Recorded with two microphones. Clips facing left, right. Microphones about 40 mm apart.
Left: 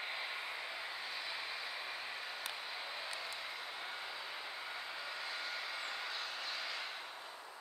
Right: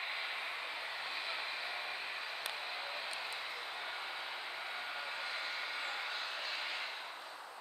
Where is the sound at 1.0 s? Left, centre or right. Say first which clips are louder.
Right 2 dB; right.